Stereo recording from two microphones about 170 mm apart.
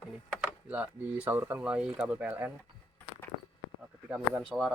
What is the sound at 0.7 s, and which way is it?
Speech, 10° right (ahead or behind).